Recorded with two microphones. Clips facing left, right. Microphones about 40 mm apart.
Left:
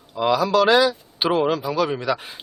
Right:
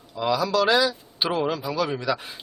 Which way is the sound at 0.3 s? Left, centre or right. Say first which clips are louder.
Left 4 dB; left.